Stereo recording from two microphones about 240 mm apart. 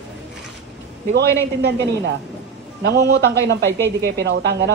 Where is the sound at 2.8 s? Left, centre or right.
Right.